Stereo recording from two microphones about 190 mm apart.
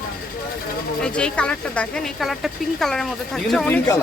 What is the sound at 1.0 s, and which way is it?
Speech, 5° left (ahead or behind).